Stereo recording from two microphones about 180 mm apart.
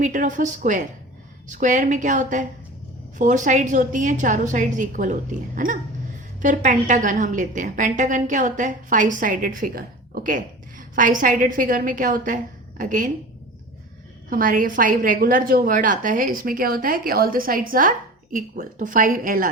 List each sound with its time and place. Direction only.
0.0 s a woman's voice: 45° right (ahead or behind)
14.3 s a woman's voice: 50° right (ahead or behind)